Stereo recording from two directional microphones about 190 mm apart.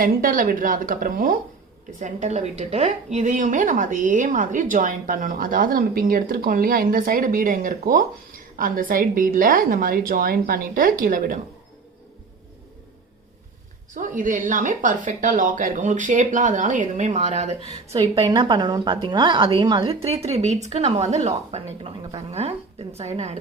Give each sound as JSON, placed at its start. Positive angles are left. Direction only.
{"t": 0.0, "sound": "a woman's voice", "side_deg": -45}
{"t": 2.0, "sound": "a woman's voice", "side_deg": -40}
{"t": 13.9, "sound": "a woman's voice", "side_deg": -45}
{"t": 17.9, "sound": "a woman's voice", "side_deg": -20}